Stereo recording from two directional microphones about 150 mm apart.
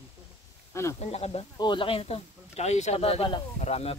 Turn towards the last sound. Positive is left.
turn(degrees=45)  # may be behind; listen again after turning